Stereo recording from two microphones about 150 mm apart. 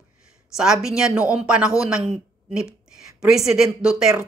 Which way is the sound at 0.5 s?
5° right (ahead or behind).